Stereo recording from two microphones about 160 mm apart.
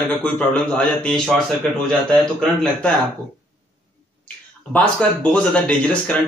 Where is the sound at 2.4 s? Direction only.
5° left (ahead or behind).